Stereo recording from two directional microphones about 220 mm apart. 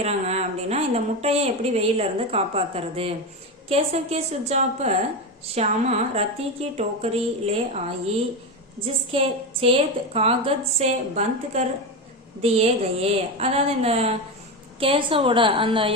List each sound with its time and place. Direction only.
0.0 s a woman's voice: 30° right (ahead or behind)